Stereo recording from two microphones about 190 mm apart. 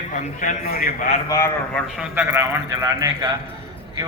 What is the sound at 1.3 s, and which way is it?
Speech, 15° left (ahead or behind).